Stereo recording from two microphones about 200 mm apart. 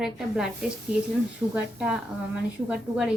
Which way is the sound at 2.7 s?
5° right (ahead or behind).